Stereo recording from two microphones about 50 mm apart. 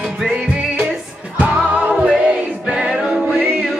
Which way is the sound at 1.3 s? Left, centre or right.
Right.